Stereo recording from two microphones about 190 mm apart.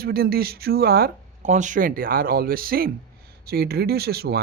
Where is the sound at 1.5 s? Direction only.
40° right (ahead or behind); by 4.4 s 55° right (ahead or behind).